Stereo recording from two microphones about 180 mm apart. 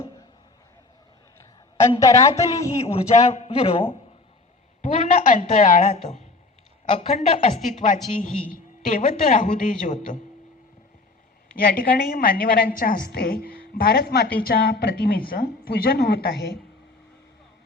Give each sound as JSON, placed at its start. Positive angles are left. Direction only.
{"t": 2.0, "sound": "speech", "side_deg": 20}
{"t": 2.8, "sound": "a man's voice", "side_deg": 35}
{"t": 4.8, "sound": "a woman's voice", "side_deg": 45}
{"t": 8.2, "sound": "a woman's voice", "side_deg": 50}
{"t": 11.5, "sound": "a woman's voice", "side_deg": 50}